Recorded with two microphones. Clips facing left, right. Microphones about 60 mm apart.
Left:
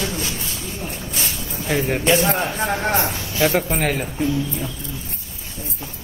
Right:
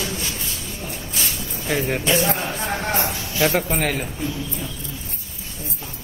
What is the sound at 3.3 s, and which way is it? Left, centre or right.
Speech, centre.